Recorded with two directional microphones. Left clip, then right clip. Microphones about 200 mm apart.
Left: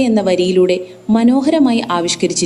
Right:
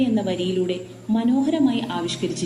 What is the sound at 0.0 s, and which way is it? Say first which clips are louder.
A woman's voice: left 10 dB; 45° left (ahead or behind).